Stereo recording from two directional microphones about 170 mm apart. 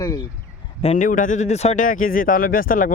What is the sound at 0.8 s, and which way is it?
Speech, 50° left (ahead or behind).